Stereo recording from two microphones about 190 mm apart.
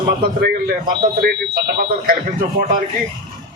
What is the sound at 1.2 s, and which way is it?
Speech, 55° right (ahead or behind).